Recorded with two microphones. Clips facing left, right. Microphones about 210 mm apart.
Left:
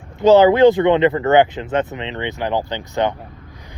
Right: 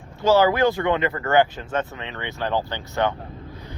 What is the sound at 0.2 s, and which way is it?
Speech, 20° left (ahead or behind).